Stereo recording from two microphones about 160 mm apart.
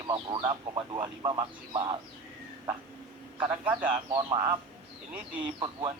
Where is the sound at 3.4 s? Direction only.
10° right (ahead or behind).